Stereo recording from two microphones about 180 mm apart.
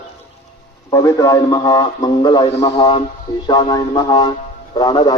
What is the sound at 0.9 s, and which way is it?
A man's voice, 20° left (ahead or behind).